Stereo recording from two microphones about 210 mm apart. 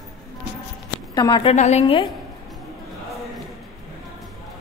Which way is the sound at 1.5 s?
30° left (ahead or behind).